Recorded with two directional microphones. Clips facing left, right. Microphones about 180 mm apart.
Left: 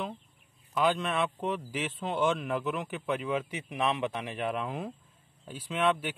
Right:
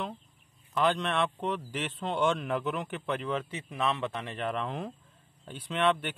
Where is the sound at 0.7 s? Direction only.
5° left (ahead or behind).